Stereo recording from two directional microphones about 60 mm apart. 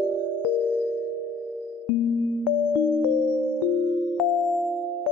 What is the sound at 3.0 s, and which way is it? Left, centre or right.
Electric piano, left.